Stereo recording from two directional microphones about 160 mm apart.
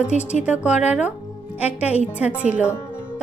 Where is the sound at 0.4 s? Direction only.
10° right (ahead or behind).